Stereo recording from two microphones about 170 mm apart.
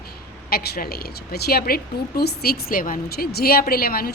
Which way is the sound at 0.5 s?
65° left (ahead or behind).